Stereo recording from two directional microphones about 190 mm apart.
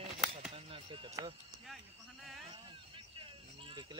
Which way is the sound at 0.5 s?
25° right (ahead or behind).